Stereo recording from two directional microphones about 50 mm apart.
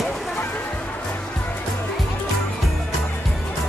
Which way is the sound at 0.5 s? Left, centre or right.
Left.